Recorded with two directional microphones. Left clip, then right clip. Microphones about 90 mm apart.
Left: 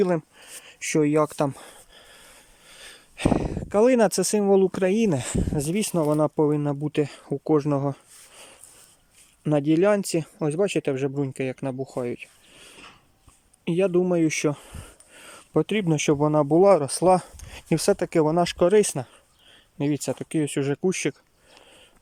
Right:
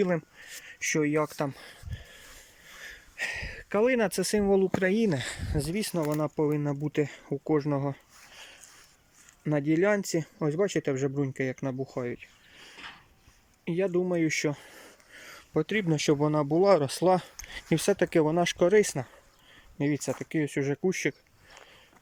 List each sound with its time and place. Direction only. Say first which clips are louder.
0.0 s speech: left 5 dB; 25° left (ahead or behind)
0.4 s speech: even; 35° left (ahead or behind)
9.4 s speech: left 5 dB; 25° left (ahead or behind); by 12.0 s 5° left (ahead or behind)
12.0 s speech: left 5 dB; 25° left (ahead or behind)
13.7 s speech: left 6 dB; 25° left (ahead or behind)
15.1 s a sound: left 6 dB; 25° left (ahead or behind)
16.1 s speech: left 9 dB; 20° left (ahead or behind)